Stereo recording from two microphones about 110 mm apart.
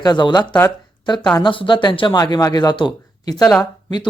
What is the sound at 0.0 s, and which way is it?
Speech, 40° left (ahead or behind).